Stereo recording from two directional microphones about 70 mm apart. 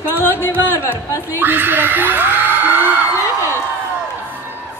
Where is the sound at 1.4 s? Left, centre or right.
Right.